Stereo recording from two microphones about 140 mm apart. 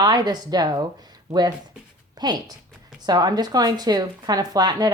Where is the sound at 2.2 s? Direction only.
30° right (ahead or behind).